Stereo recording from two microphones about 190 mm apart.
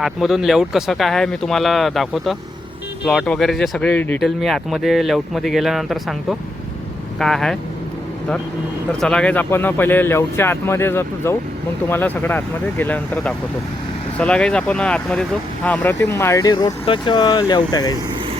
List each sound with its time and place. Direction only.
0.0 s speech: centre (ahead or behind)
7.2 s speech: 5° left (ahead or behind)
8.9 s speech: 5° left (ahead or behind); by 17.9 s 20° left (ahead or behind)